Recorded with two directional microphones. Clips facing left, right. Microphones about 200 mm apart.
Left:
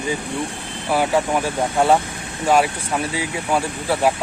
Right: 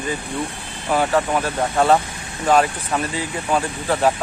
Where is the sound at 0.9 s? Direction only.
10° left (ahead or behind).